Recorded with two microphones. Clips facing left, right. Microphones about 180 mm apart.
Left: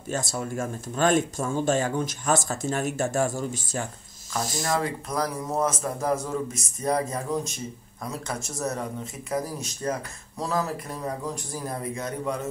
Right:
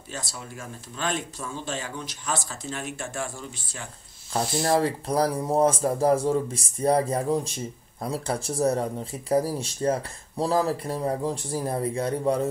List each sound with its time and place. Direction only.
0.1 s speech: 50° left (ahead or behind)
4.6 s speech: 30° right (ahead or behind)